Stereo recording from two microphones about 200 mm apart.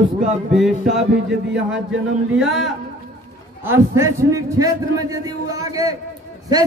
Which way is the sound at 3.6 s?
15° right (ahead or behind).